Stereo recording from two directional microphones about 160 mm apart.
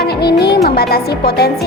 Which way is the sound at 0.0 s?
90° left.